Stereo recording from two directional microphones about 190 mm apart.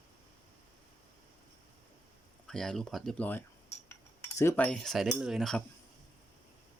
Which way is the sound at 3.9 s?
15° left (ahead or behind).